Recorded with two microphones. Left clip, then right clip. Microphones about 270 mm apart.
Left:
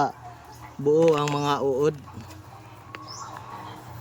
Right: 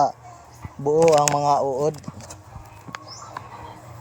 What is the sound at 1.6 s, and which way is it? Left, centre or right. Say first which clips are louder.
Speech: right 1 dB; left.